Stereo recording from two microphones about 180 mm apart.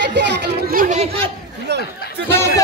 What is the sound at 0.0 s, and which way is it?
Chatter, 75° right (ahead or behind).